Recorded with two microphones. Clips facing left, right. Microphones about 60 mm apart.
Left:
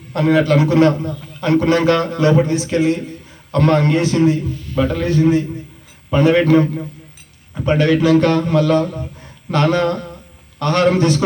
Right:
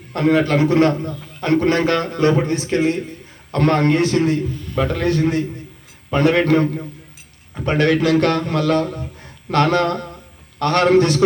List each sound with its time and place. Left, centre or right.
0.1 s a man's voice: right
6.1 s a man's voice: right